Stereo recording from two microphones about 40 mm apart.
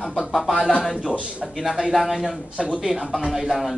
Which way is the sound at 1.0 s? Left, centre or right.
Right.